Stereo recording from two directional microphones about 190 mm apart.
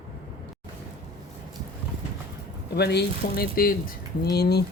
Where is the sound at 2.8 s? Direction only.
60° left (ahead or behind).